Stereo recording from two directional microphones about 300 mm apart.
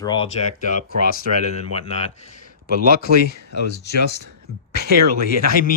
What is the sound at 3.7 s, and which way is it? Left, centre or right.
Speech, left.